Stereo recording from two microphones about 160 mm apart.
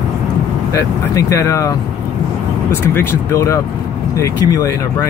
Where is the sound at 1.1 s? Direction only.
20° left (ahead or behind).